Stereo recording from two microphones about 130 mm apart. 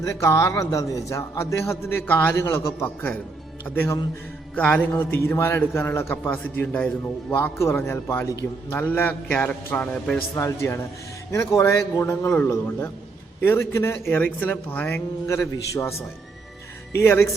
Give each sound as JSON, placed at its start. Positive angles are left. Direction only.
{"t": 0.0, "sound": "a man's voice", "side_deg": 25}
{"t": 4.5, "sound": "a man's voice", "side_deg": 10}
{"t": 17.0, "sound": "a man's voice", "side_deg": 20}